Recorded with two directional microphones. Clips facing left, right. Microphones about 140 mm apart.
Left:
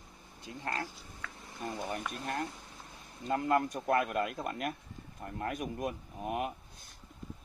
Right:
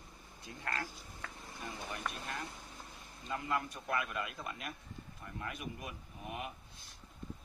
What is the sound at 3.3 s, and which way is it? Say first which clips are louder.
A man's voice: left 8 dB; 50° left (ahead or behind).